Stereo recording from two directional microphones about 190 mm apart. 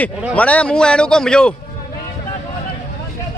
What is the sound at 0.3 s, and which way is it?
A man's voice, 5° left (ahead or behind).